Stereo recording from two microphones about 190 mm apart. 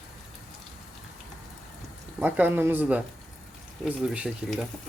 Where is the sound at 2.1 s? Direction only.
10° right (ahead or behind).